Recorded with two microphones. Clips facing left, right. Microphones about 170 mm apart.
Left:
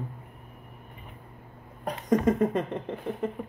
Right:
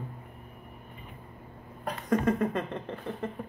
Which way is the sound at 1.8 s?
15° left (ahead or behind).